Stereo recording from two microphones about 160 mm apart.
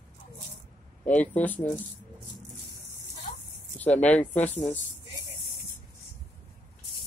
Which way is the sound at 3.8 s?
10° left (ahead or behind).